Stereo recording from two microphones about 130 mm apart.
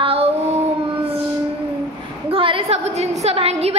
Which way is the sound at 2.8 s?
55° right (ahead or behind).